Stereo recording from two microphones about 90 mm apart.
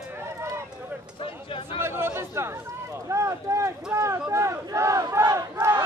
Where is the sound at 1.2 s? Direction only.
90° left.